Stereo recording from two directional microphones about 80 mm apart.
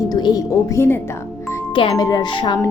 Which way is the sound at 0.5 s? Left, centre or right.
Left.